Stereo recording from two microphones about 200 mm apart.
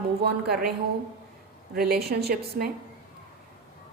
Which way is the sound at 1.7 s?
50° right (ahead or behind).